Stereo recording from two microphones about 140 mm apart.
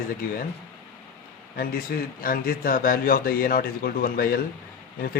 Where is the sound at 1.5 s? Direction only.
90° left.